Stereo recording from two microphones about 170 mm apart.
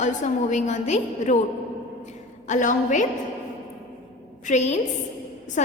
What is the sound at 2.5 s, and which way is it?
Speech, 45° left (ahead or behind).